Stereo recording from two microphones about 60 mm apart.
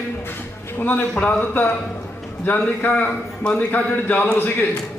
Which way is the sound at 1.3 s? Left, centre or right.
Left.